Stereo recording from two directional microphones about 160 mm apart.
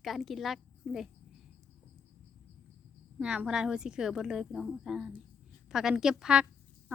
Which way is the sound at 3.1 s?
10° right (ahead or behind).